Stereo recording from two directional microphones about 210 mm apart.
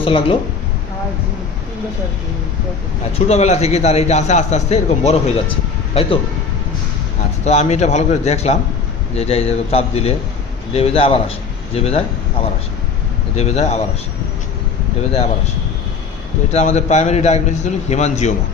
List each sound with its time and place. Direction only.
0.0 s speech: 25° left (ahead or behind)
3.2 s a man's voice: 30° left (ahead or behind)
7.4 s a man's voice: 30° left (ahead or behind)
13.3 s a man's voice: 30° left (ahead or behind)
16.5 s a man's voice: 30° left (ahead or behind)